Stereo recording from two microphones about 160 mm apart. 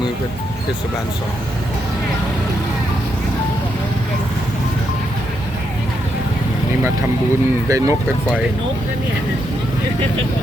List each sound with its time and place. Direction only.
7.7 s speech: 20° right (ahead or behind)